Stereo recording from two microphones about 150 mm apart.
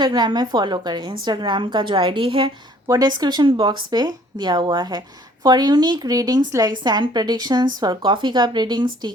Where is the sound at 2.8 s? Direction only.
25° right (ahead or behind).